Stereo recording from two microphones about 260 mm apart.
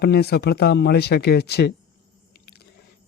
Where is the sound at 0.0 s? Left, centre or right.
Left.